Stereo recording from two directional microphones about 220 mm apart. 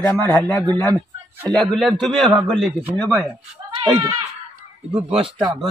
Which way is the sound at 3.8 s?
20° right (ahead or behind).